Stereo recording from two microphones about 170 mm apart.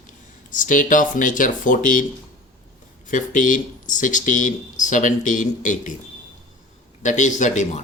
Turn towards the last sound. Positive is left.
turn(degrees=45)  # may be behind; listen again after turning